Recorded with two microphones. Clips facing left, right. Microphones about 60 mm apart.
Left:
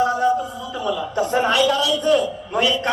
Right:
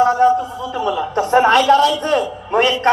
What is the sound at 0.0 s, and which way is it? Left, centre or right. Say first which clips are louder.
A man's voice: right 5 dB; right.